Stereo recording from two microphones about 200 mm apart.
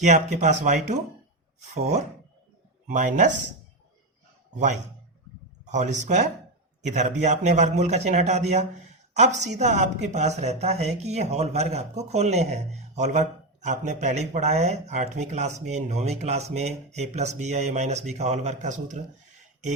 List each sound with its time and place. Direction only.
0.0 s speech: 35° right (ahead or behind)
5.6 s speech: 35° right (ahead or behind)